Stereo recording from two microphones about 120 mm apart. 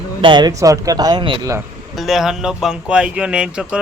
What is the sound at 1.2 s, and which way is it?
Speech, 45° right (ahead or behind).